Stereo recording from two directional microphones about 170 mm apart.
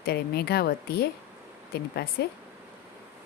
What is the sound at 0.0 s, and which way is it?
Speech, 70° left (ahead or behind).